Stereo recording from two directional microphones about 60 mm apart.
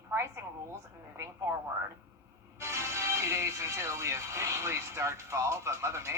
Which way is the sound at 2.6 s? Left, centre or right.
Right.